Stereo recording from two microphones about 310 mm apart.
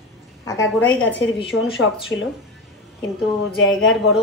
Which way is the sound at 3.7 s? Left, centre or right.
Centre.